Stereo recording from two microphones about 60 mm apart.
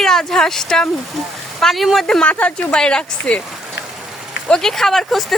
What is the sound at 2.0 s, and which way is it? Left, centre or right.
Speech, centre.